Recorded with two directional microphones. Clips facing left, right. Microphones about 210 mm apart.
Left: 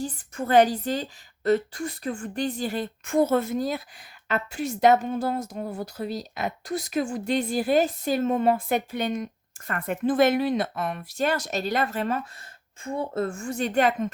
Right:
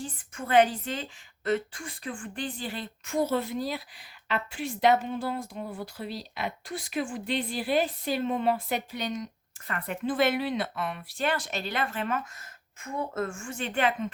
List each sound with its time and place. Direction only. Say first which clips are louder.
0.0 s a woman's voice: left 7 dB; 40° left (ahead or behind)